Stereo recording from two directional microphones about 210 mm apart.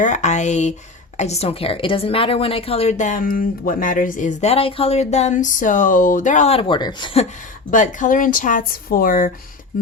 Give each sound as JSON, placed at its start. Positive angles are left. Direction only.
{"t": 0.0, "sound": "speech", "side_deg": 35}
{"t": 7.7, "sound": "speech", "side_deg": 40}
{"t": 9.7, "sound": "a sound", "side_deg": 40}